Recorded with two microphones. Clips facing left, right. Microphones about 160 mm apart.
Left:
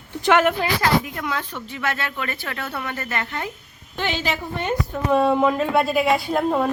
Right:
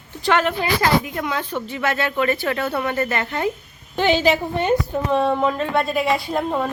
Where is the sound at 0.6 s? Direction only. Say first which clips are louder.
Right 2 dB; 10° right (ahead or behind).